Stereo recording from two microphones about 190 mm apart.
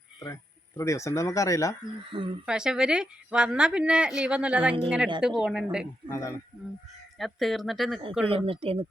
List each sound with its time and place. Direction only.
0.8 s speech: 15° left (ahead or behind)
2.1 s speech: 25° right (ahead or behind)
2.5 s a woman's voice: 5° right (ahead or behind)
6.1 s speech: 15° left (ahead or behind)
7.2 s a woman's voice: centre (ahead or behind)
8.3 s speech: 30° right (ahead or behind)